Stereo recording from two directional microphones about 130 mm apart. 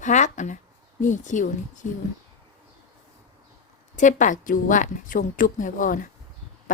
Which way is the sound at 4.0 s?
80° left.